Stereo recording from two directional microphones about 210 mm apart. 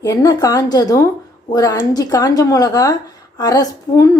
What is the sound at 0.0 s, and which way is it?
Speech, 15° left (ahead or behind).